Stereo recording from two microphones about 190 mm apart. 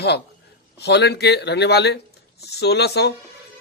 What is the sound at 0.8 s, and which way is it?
A man's voice, 60° left (ahead or behind).